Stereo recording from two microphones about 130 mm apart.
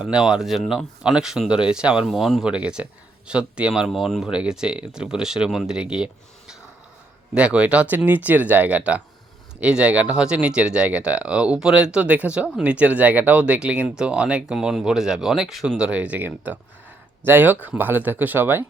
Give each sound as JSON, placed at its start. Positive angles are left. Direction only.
{"t": 0.0, "sound": "speech", "side_deg": -5}
{"t": 7.3, "sound": "speech", "side_deg": -10}